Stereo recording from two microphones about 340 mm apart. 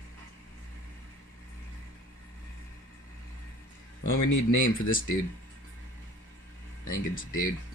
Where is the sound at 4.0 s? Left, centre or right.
Left.